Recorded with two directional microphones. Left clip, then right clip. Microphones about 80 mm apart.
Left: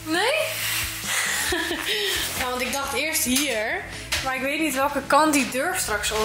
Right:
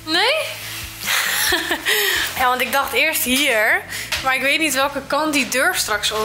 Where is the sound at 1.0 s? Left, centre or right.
Right.